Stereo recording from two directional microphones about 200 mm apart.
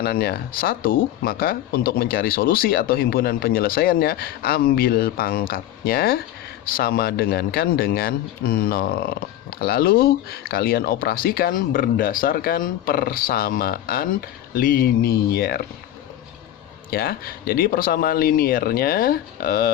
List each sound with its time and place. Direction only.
0.0 s speech: 50° left (ahead or behind)
16.9 s speech: 50° left (ahead or behind)